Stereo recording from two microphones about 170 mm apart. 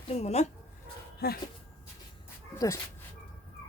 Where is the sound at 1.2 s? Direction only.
65° left (ahead or behind).